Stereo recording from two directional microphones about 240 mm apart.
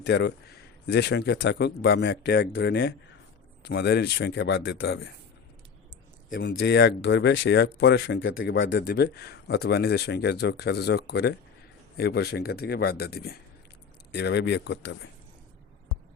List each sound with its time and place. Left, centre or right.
0.0 s speech: left
6.3 s speech: left